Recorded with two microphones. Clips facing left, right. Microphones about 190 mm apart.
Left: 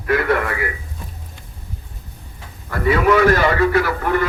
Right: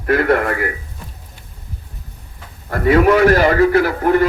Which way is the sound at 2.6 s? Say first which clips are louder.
Right 4 dB; 45° right (ahead or behind).